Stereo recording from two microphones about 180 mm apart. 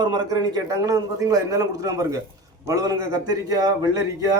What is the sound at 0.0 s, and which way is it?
A man's voice, 25° right (ahead or behind).